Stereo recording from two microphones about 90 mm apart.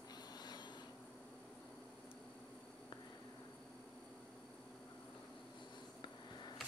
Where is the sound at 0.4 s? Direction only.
50° left (ahead or behind).